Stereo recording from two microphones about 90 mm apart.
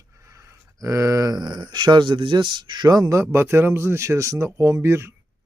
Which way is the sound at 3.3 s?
25° right (ahead or behind).